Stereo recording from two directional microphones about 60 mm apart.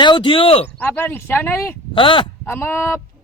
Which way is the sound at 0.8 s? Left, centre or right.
Left.